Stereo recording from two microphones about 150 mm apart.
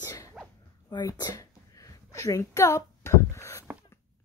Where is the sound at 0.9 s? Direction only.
25° left (ahead or behind).